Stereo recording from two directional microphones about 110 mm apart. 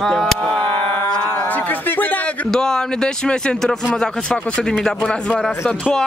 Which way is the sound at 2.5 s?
5° left (ahead or behind).